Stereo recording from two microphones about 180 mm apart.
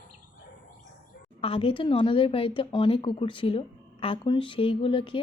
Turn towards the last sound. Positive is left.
turn(degrees=30)  # may be behind; listen again after turning